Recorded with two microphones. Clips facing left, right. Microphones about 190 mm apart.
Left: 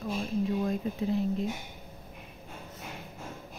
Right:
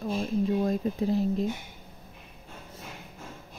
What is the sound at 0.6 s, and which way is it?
Speech, 35° right (ahead or behind).